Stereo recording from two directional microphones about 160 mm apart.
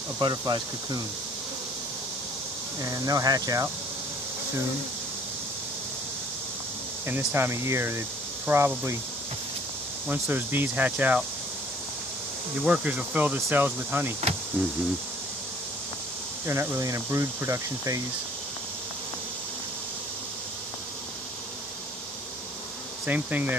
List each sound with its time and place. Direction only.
0.2 s speech: 30° right (ahead or behind)
2.8 s speech: 20° right (ahead or behind)
7.1 s speech: 15° right (ahead or behind)
10.1 s speech: 10° right (ahead or behind)
12.6 s speech: 5° right (ahead or behind)
16.5 s speech: 15° right (ahead or behind)
23.0 s speech: 10° right (ahead or behind)